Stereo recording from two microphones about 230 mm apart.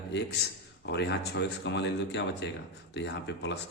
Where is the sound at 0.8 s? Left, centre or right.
Left.